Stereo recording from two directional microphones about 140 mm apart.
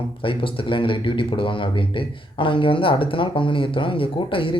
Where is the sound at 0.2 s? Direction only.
40° left (ahead or behind).